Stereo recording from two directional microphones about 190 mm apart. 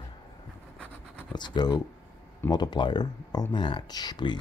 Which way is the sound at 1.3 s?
25° left (ahead or behind).